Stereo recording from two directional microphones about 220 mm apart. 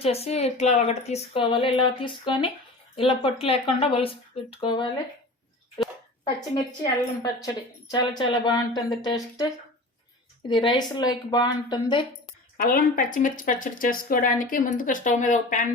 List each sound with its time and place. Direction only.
0.0 s speech: 25° left (ahead or behind)
6.5 s a woman's voice: 15° left (ahead or behind)
10.5 s speech: 20° left (ahead or behind)
12.5 s speech: 40° left (ahead or behind)